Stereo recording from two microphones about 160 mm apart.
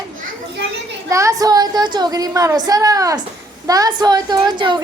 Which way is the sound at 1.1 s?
20° right (ahead or behind).